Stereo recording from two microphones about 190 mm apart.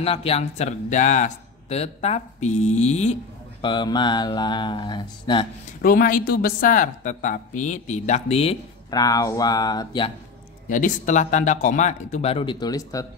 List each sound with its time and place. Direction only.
0.0 s speech: 30° left (ahead or behind)
3.6 s speech: 25° left (ahead or behind)
5.8 s a woman's voice: 50° left (ahead or behind); by 9.0 s 30° left (ahead or behind)
9.0 s speech: 20° left (ahead or behind)
10.7 s speech: 40° left (ahead or behind); by 13.0 s 20° left (ahead or behind)